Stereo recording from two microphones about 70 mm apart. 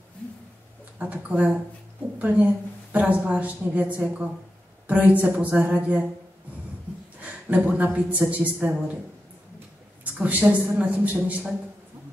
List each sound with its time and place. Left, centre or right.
0.9 s a woman's voice: right
7.2 s a woman's voice: right
10.1 s a woman's voice: centre